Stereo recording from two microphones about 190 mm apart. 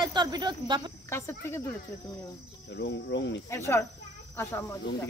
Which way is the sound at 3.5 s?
15° left (ahead or behind).